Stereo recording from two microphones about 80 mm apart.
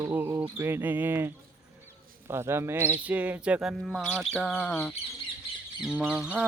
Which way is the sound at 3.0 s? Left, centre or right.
Centre.